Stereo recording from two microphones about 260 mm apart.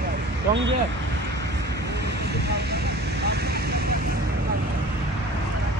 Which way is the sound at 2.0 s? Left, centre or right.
Right.